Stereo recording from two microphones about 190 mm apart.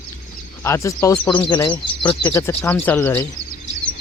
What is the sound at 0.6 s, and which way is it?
Speech, 15° left (ahead or behind).